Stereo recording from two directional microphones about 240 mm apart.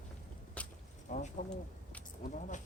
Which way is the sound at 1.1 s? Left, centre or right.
Left.